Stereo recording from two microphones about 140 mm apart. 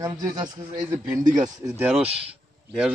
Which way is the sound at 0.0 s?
30° right (ahead or behind).